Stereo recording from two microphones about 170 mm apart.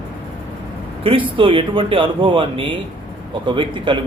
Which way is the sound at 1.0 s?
30° right (ahead or behind).